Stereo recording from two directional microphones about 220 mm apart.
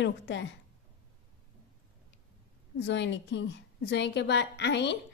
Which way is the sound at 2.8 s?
55° left (ahead or behind).